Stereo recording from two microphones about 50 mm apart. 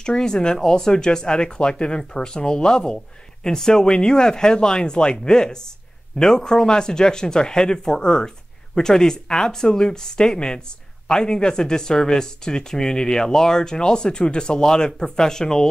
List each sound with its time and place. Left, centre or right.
0.0 s speech: centre